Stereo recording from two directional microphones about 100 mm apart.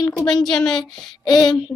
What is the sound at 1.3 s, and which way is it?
Speech, 45° left (ahead or behind).